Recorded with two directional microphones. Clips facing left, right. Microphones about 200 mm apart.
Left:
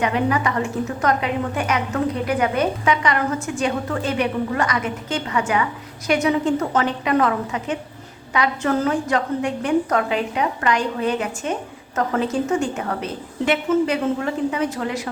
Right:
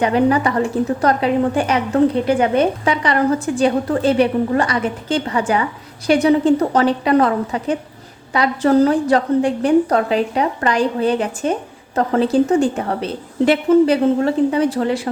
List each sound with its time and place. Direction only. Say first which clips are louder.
0.0 s a woman's voice: right 5 dB; 35° right (ahead or behind)